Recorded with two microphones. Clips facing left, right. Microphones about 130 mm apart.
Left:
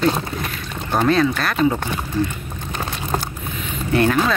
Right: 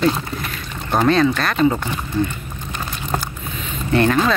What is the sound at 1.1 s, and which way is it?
Speech, 5° left (ahead or behind).